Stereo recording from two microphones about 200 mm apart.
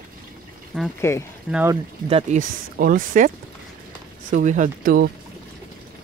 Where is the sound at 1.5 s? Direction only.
10° right (ahead or behind).